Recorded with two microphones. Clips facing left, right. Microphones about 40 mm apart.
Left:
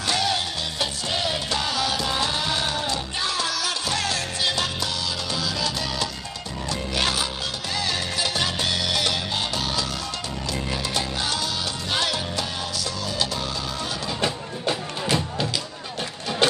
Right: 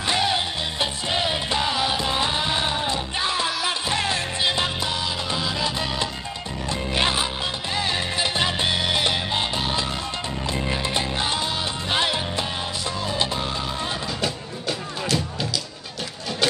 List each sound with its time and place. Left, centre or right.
0.0 s music: right